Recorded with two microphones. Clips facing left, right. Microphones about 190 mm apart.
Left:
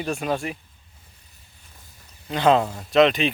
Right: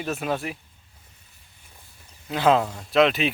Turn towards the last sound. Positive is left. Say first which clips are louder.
# left 2 dB
turn(degrees=0)  # may be behind; listen again after turning